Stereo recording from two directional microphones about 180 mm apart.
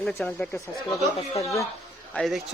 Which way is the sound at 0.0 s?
Centre (ahead or behind).